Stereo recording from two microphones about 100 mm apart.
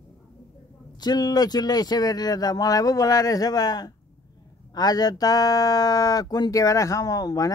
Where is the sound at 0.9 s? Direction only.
40° left (ahead or behind).